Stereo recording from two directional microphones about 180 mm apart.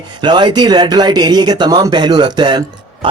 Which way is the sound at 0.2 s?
25° right (ahead or behind).